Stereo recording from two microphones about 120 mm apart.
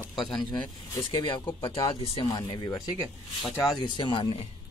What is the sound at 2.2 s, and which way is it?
Speech, 35° left (ahead or behind).